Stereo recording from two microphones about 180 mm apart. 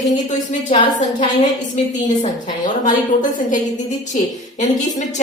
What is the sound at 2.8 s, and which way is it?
A woman's voice, 45° left (ahead or behind).